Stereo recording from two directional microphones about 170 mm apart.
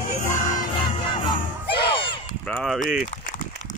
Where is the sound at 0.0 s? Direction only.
50° left (ahead or behind).